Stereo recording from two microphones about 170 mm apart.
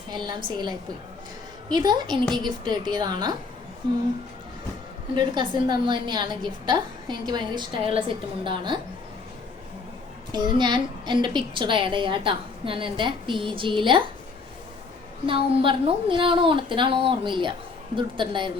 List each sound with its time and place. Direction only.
0.1 s a woman's voice: 25° right (ahead or behind)
1.7 s a woman's voice: 25° right (ahead or behind)
5.1 s a woman's voice: 25° right (ahead or behind)
10.3 s a woman's voice: 25° right (ahead or behind)
15.3 s a woman's voice: 30° right (ahead or behind)